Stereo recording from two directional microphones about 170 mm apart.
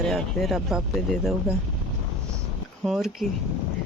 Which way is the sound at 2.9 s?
Centre (ahead or behind).